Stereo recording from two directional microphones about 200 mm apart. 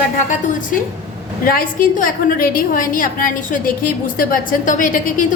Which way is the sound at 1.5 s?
45° left (ahead or behind).